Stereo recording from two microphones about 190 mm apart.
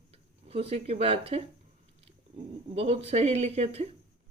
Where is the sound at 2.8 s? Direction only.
30° right (ahead or behind).